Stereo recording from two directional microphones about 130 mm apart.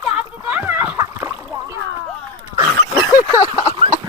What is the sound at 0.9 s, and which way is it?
Splash, 20° right (ahead or behind).